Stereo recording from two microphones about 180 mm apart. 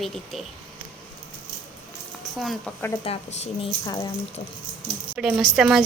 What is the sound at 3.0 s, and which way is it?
A woman's voice, 30° left (ahead or behind).